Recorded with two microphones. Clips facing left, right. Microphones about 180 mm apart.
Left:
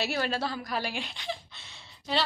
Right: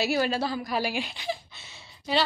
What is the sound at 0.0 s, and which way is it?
A woman's voice, 5° right (ahead or behind).